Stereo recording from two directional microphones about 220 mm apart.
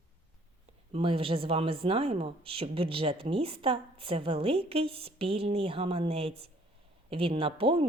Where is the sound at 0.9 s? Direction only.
25° right (ahead or behind).